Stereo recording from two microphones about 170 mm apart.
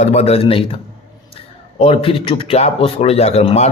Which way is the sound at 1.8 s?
35° left (ahead or behind).